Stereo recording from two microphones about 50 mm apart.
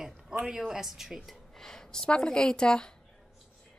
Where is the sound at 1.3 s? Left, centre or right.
Centre.